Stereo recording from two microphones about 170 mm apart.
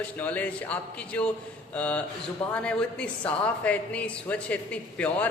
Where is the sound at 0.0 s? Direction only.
10° left (ahead or behind).